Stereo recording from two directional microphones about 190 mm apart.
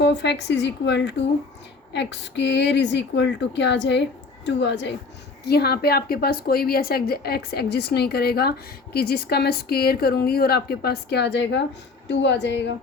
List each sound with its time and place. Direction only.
0.0 s a woman's voice: 65° left (ahead or behind)
5.5 s a woman's voice: 55° left (ahead or behind)